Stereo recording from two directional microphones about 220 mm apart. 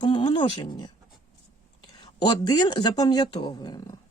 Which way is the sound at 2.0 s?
20° left (ahead or behind).